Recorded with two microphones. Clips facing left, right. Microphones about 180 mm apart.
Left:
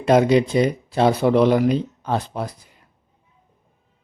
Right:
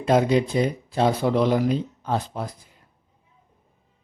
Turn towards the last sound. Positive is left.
turn(degrees=75)  # may be behind; listen again after turning